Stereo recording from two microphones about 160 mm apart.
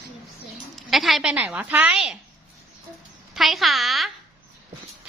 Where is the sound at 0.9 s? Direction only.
Centre (ahead or behind).